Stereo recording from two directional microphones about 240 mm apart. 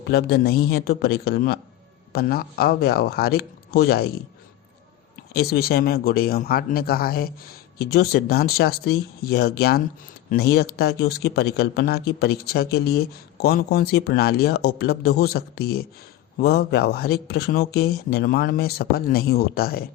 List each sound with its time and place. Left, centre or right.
0.0 s speech: left
5.3 s speech: left